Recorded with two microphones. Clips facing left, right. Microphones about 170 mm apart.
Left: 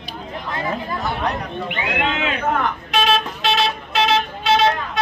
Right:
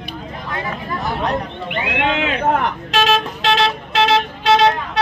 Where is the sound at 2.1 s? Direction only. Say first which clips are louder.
Right 3 dB; 85° right.